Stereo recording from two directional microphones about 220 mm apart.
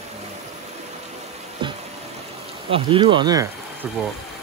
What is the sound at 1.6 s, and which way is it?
Music, 20° right (ahead or behind).